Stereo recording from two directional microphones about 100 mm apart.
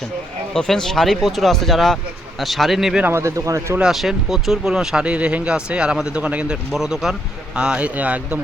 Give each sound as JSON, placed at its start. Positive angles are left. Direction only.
{"t": 0.5, "sound": "speech", "side_deg": 5}
{"t": 3.0, "sound": "speech", "side_deg": -25}
{"t": 3.8, "sound": "speech", "side_deg": -5}